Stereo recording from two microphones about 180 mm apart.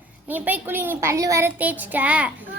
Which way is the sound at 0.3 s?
10° right (ahead or behind).